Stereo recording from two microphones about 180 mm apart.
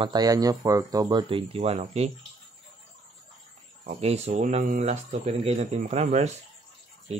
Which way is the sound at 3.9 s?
35° right (ahead or behind).